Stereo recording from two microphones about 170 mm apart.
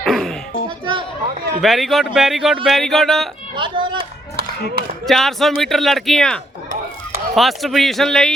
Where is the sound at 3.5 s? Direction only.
30° right (ahead or behind).